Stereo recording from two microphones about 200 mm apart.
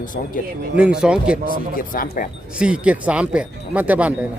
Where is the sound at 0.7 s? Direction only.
5° right (ahead or behind).